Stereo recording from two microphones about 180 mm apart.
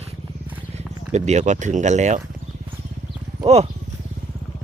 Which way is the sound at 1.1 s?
40° right (ahead or behind).